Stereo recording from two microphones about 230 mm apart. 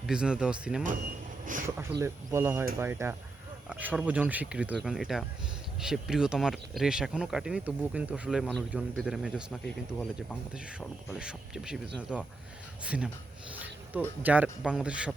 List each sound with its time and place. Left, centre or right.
0.1 s speech: centre
1.5 s speech: right
2.0 s speech: centre
14.2 s speech: centre